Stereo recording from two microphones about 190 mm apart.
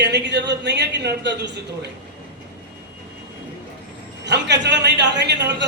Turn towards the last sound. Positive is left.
turn(degrees=-65)  # may be behind; listen again after turning